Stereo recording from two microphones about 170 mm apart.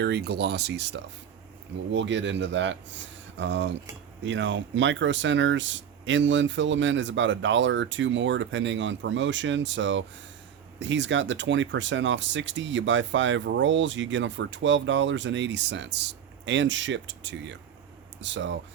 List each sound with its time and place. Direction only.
0.0 s speech: 75° right (ahead or behind)